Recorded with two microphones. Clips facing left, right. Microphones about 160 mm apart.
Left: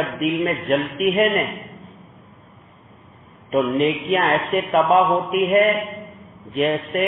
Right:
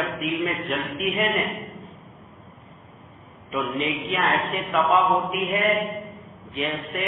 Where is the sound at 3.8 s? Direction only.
50° left (ahead or behind).